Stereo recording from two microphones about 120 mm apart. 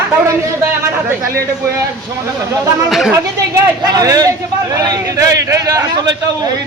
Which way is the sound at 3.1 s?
25° right (ahead or behind).